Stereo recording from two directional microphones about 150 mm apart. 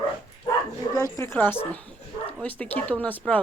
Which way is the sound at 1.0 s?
15° left (ahead or behind).